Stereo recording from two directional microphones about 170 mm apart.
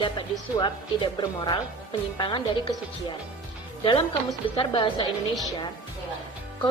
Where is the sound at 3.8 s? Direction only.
30° left (ahead or behind).